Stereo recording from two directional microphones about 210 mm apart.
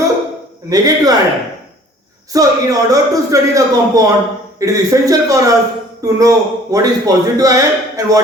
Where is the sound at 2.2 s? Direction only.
15° right (ahead or behind).